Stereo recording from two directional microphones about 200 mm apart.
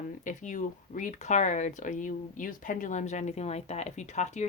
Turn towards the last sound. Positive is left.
turn(degrees=35)  # may be behind; listen again after turning